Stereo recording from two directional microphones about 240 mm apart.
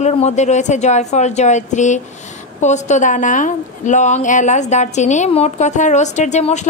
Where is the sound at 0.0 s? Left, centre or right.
Left.